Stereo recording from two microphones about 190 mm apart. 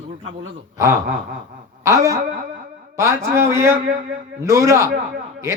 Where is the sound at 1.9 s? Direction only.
20° right (ahead or behind).